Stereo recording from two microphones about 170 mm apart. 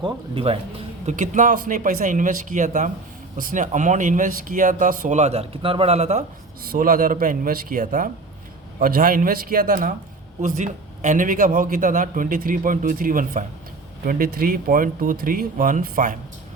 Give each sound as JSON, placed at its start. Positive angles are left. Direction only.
{"t": 0.0, "sound": "speech", "side_deg": -30}
{"t": 1.0, "sound": "a man's voice", "side_deg": -45}
{"t": 6.6, "sound": "speech", "side_deg": -55}
{"t": 10.4, "sound": "a man's voice", "side_deg": -45}